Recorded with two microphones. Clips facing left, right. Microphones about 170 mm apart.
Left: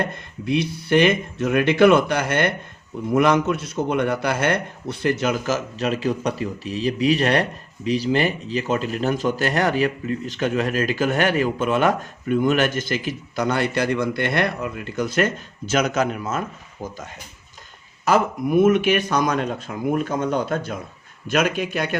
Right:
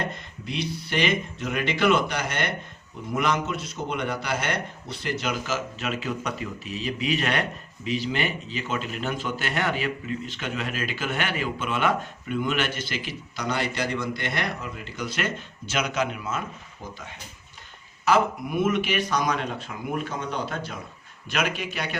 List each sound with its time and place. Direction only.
0.1 s speech: 55° left (ahead or behind)
18.0 s speech: 45° left (ahead or behind)